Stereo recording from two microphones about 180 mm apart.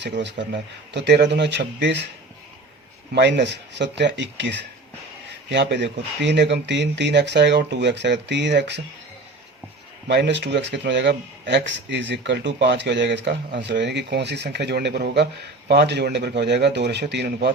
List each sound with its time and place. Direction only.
0.0 s speech: 75° right (ahead or behind)
3.2 s speech: 75° right (ahead or behind)
10.1 s speech: 70° right (ahead or behind)